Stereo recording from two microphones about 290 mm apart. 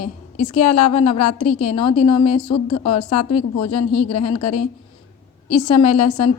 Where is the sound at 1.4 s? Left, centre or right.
Left.